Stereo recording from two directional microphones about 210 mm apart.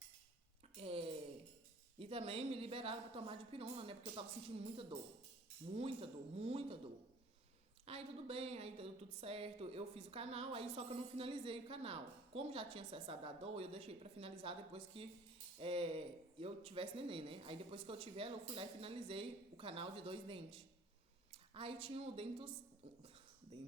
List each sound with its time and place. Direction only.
0.8 s a sound: 25° right (ahead or behind)
2.0 s a woman's voice: 25° right (ahead or behind)
7.9 s a woman's voice: 30° right (ahead or behind)